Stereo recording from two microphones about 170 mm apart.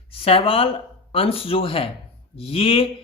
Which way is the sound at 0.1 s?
35° left (ahead or behind).